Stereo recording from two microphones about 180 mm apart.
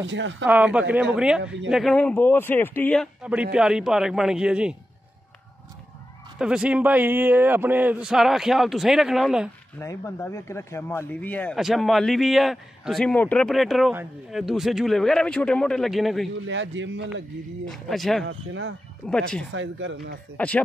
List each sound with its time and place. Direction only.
0.0 s speech: 90° right
0.5 s a man's voice: 5° right (ahead or behind)
6.3 s a man's voice: 5° right (ahead or behind)
9.8 s a man's voice: 15° left (ahead or behind); by 16.3 s centre (ahead or behind)
16.4 s speech: 90° right
17.6 s a man's voice: centre (ahead or behind)
19.5 s speech: 90° right
20.3 s speech: 10° left (ahead or behind)